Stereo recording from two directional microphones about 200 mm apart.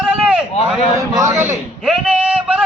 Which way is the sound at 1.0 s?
15° right (ahead or behind).